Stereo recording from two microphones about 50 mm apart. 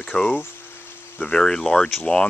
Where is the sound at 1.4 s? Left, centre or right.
Centre.